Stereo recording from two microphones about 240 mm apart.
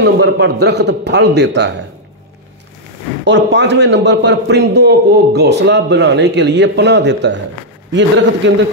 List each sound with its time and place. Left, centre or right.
0.0 s a man's voice: right
3.3 s a man's voice: right